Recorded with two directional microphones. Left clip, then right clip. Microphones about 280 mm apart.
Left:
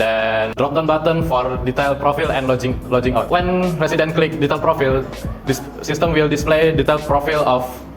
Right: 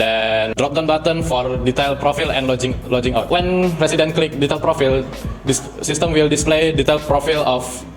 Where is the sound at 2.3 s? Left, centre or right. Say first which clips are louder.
Even; right.